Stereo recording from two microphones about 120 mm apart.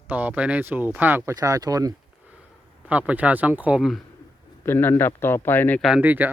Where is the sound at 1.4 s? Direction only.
30° right (ahead or behind).